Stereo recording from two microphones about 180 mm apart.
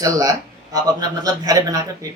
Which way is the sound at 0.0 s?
20° right (ahead or behind).